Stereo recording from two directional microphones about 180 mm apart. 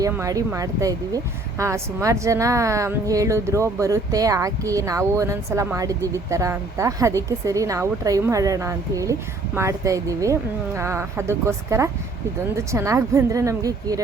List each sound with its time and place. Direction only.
0.0 s speech: 20° right (ahead or behind)